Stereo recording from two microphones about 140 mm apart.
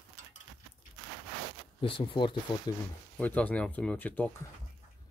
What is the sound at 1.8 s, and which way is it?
Speech, 40° left (ahead or behind).